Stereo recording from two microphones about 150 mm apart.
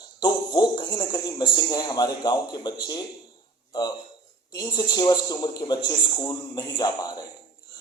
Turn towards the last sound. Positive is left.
turn(degrees=25)  # may be behind; listen again after turning